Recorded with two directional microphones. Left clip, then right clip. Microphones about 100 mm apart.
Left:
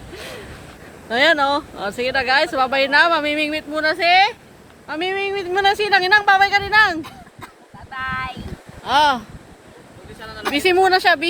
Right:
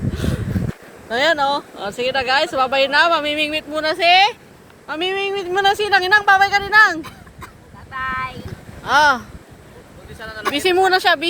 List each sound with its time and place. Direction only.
0.2 s a sound: 25° left (ahead or behind)
1.0 s speech: 65° left (ahead or behind); by 3.5 s 40° left (ahead or behind)
3.5 s speech: 25° left (ahead or behind)
7.9 s a sound: 5° left (ahead or behind)
8.8 s speech: 20° left (ahead or behind)
10.2 s speech: 30° right (ahead or behind)
10.5 s speech: 35° left (ahead or behind)